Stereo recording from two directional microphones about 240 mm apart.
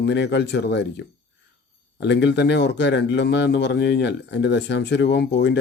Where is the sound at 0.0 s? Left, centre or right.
Left.